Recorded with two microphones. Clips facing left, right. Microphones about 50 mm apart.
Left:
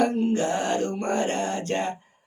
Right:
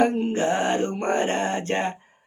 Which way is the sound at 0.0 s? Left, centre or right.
Right.